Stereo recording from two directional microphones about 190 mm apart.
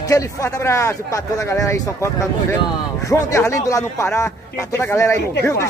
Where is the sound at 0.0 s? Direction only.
15° left (ahead or behind).